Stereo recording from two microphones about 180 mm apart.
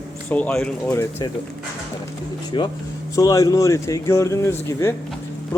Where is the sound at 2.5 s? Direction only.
25° left (ahead or behind).